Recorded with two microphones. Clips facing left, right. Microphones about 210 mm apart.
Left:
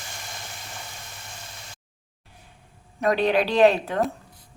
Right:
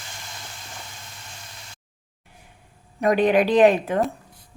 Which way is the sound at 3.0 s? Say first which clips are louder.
Right 3 dB; 15° right (ahead or behind).